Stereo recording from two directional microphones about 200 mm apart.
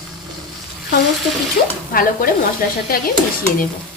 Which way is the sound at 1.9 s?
45° left (ahead or behind).